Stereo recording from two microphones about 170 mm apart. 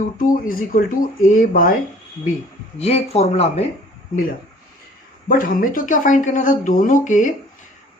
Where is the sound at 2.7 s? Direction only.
40° left (ahead or behind).